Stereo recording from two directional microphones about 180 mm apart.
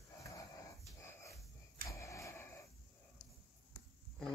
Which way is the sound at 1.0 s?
15° left (ahead or behind).